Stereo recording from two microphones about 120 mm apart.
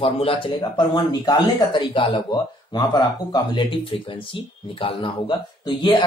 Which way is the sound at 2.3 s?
35° left (ahead or behind).